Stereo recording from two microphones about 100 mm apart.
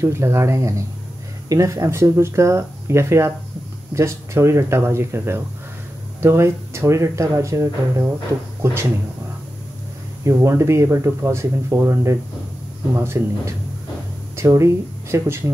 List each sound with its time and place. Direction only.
0.0 s speech: 25° right (ahead or behind)
10.2 s speech: 30° right (ahead or behind)